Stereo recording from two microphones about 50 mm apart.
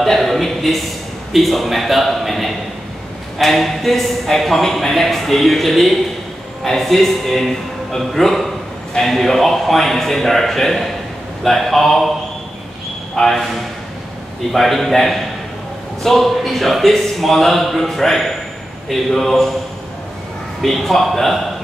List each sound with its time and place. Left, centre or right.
0.0 s a sound: centre
1.3 s a man's voice: centre
13.1 s speech: centre
14.5 s a man's voice: centre
20.6 s a man's voice: centre